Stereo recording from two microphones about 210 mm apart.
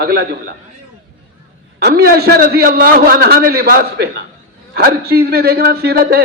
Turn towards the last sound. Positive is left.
turn(degrees=-50)  # may be behind; listen again after turning